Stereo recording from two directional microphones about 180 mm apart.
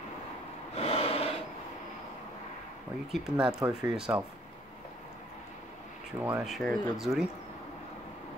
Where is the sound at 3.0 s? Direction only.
Centre (ahead or behind).